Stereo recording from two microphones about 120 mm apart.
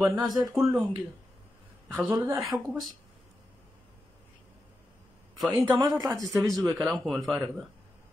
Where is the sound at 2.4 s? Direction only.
Centre (ahead or behind).